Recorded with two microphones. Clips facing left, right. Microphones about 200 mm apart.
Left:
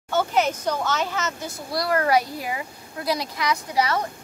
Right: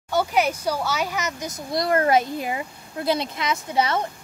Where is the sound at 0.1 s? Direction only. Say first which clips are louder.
Even; 10° right (ahead or behind).